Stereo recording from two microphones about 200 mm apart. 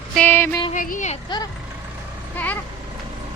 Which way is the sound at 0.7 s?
40° left (ahead or behind).